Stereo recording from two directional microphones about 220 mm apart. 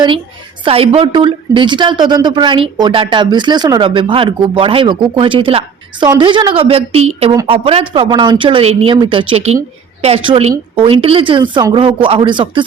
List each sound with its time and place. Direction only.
0.6 s a woman's voice: 25° right (ahead or behind)